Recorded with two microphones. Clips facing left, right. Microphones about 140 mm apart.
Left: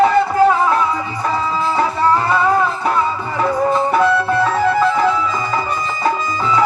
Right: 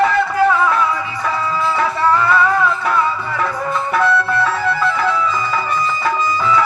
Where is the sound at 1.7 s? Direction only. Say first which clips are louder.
Left 1 dB; 25° left (ahead or behind).